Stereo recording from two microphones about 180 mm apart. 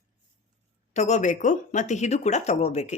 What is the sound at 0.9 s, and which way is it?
Speech, 40° left (ahead or behind).